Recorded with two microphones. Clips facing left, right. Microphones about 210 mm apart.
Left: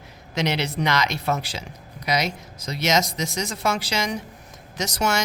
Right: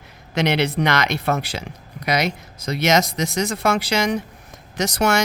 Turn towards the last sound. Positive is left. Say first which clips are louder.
# right 5 dB
turn(degrees=-60)  # may be behind; listen again after turning